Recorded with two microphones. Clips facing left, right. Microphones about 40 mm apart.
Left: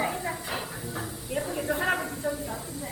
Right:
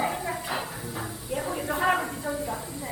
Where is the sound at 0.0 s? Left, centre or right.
Centre.